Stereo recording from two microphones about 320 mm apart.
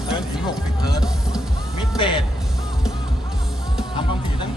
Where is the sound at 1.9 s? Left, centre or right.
Centre.